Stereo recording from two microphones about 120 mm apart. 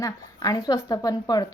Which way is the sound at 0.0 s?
30° left (ahead or behind).